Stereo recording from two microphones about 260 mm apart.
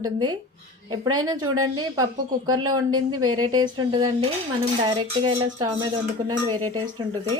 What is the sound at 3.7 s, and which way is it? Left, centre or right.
Speech, centre.